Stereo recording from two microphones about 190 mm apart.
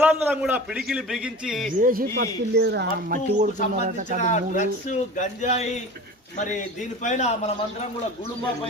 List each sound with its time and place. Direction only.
0.0 s a man's voice: 10° right (ahead or behind)
1.8 s speech: 50° right (ahead or behind)
3.1 s speech: 45° right (ahead or behind)
4.2 s speech: 40° left (ahead or behind)